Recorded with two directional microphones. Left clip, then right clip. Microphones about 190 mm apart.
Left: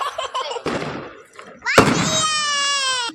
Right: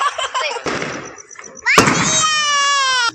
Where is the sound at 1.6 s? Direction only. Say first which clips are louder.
Right 3 dB; 35° left (ahead or behind).